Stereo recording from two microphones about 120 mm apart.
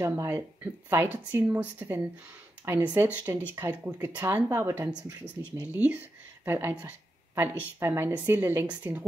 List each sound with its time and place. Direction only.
0.0 s a woman's voice: 20° right (ahead or behind)
5.2 s speech: 15° left (ahead or behind)
5.6 s a woman's voice: 15° right (ahead or behind)